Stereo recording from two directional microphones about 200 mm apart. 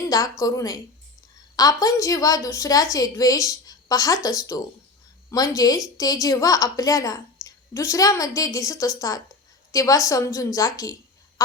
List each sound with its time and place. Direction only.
0.1 s a woman's voice: 15° left (ahead or behind)